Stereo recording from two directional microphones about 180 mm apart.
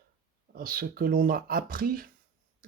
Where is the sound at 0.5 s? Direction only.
55° right (ahead or behind).